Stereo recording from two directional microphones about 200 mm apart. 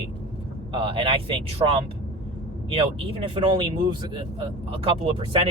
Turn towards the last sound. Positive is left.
turn(degrees=-25)  # may be behind; listen again after turning